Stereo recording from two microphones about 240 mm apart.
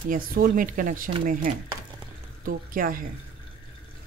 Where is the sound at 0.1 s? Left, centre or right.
Right.